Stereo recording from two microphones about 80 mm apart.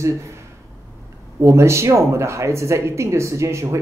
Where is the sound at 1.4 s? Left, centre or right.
Right.